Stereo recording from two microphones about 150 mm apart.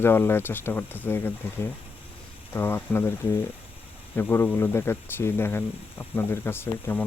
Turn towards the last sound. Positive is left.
turn(degrees=15)  # may be behind; listen again after turning